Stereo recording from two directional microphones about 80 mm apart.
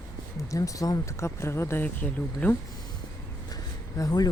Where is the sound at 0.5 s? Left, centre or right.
Left.